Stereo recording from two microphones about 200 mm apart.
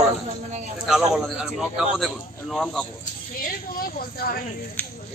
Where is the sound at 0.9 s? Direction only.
Centre (ahead or behind).